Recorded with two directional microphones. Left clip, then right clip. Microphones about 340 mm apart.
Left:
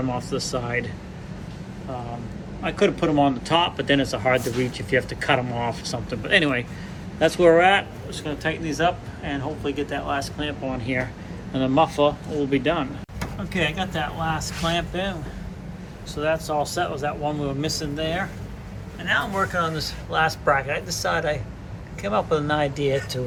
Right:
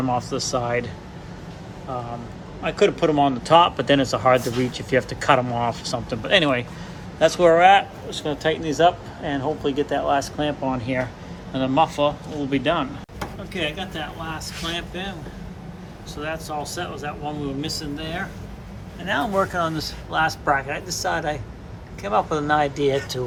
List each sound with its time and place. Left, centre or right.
0.1 s speech: centre
2.6 s speech: centre
16.1 s speech: centre
19.0 s speech: centre